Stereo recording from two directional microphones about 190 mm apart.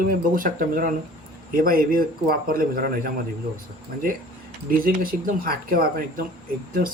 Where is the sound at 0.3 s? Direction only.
45° right (ahead or behind).